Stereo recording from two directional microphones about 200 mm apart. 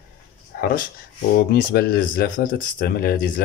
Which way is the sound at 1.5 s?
50° left (ahead or behind).